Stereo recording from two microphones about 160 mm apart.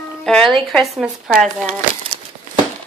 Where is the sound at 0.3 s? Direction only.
5° left (ahead or behind).